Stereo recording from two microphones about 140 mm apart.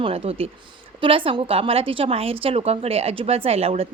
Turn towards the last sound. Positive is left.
turn(degrees=-45)  # may be behind; listen again after turning